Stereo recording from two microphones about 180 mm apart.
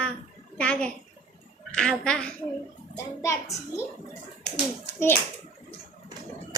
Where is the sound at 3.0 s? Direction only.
15° left (ahead or behind).